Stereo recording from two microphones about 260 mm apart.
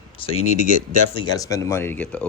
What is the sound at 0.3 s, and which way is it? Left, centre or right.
Speech, left.